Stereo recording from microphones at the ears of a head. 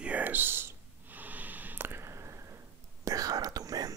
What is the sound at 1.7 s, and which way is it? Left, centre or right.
Whispering, right.